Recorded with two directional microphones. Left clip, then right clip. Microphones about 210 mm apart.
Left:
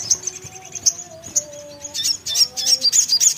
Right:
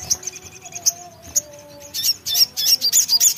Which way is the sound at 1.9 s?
20° right (ahead or behind).